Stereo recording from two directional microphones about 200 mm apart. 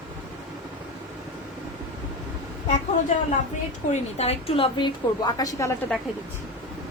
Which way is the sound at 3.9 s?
30° left (ahead or behind).